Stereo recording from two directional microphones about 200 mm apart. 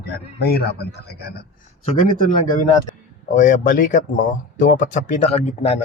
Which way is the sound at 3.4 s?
40° left (ahead or behind).